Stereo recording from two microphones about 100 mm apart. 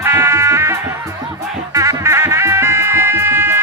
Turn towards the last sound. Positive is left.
turn(degrees=-25)  # may be behind; listen again after turning